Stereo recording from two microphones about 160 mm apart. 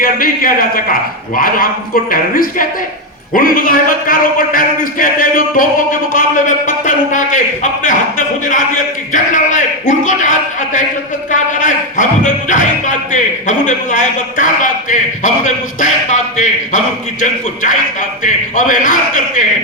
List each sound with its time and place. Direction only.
0.0 s a man's voice: 60° left (ahead or behind)
9.1 s a man's voice: 50° left (ahead or behind)